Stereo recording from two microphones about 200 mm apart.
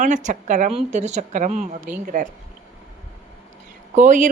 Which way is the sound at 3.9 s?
40° right (ahead or behind).